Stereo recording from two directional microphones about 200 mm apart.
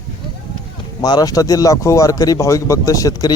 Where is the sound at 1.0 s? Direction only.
20° left (ahead or behind).